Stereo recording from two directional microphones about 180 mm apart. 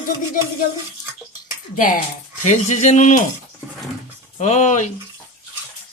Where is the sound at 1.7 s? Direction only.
50° left (ahead or behind).